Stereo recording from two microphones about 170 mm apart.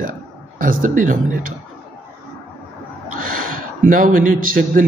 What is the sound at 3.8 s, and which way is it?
A man's voice, 55° right (ahead or behind).